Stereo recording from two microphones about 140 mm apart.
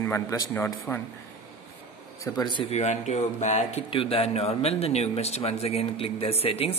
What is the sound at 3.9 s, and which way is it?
Speech, 45° left (ahead or behind).